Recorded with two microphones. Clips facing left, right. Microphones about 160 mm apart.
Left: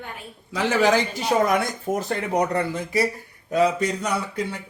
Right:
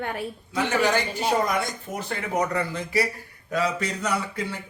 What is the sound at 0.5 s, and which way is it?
Speech, 90° left.